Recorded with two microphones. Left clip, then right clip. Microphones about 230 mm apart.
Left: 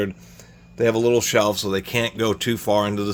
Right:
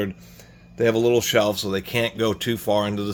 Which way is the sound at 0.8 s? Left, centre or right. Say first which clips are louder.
Left 1 dB; centre.